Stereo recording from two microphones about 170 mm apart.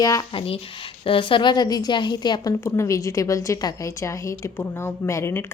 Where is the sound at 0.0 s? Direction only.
20° left (ahead or behind).